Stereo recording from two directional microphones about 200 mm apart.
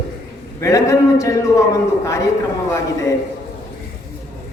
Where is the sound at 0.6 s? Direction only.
15° left (ahead or behind).